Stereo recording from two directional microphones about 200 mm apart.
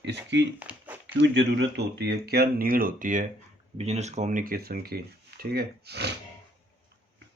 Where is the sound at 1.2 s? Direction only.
60° right (ahead or behind).